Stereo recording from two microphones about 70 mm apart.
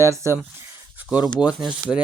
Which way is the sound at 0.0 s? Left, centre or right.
Right.